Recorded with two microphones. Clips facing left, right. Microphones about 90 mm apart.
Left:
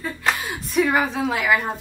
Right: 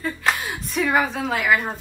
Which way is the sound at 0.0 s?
Centre (ahead or behind).